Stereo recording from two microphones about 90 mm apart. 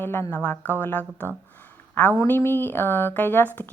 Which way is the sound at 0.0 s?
25° left (ahead or behind).